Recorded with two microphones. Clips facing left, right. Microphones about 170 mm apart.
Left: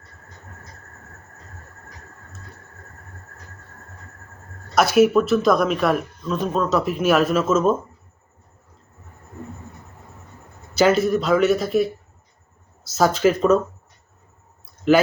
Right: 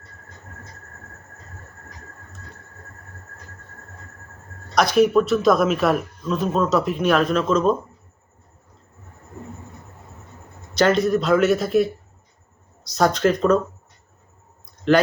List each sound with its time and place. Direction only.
4.7 s a man's voice: 5° left (ahead or behind)
10.8 s a man's voice: 5° left (ahead or behind)
14.6 s a sound: 5° left (ahead or behind)